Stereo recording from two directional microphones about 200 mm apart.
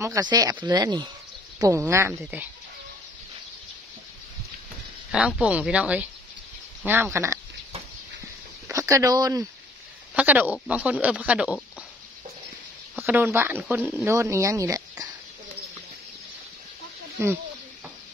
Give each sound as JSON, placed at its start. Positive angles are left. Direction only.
{"t": 0.0, "sound": "speech", "side_deg": -20}
{"t": 5.1, "sound": "speech", "side_deg": -5}
{"t": 8.6, "sound": "speech", "side_deg": -15}
{"t": 12.9, "sound": "speech", "side_deg": -10}
{"t": 17.2, "sound": "speech", "side_deg": -10}